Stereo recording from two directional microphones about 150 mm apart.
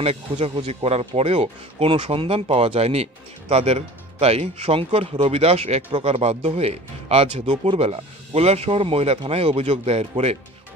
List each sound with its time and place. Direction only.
0.0 s speech: 45° right (ahead or behind)